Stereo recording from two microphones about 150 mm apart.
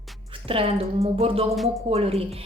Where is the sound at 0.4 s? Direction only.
40° right (ahead or behind).